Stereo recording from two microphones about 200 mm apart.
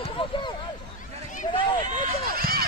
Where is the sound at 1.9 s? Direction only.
45° right (ahead or behind).